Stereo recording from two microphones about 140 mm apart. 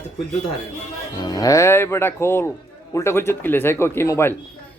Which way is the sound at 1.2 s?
30° left (ahead or behind).